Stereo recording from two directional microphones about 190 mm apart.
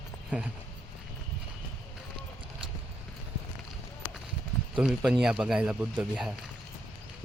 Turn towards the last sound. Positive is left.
turn(degrees=-5)  # may be behind; listen again after turning